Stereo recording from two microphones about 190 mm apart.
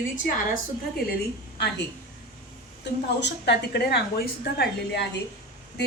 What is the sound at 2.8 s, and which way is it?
A woman's voice, 65° left (ahead or behind).